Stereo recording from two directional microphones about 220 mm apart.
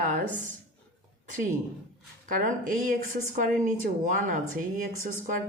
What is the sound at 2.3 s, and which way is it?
Speech, 35° right (ahead or behind).